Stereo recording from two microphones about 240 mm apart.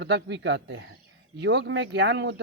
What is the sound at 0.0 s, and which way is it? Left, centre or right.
Speech, right.